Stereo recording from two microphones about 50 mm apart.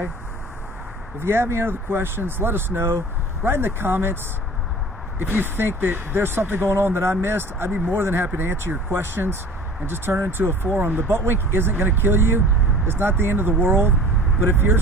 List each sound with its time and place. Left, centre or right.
1.2 s speech: right
5.2 s speech: right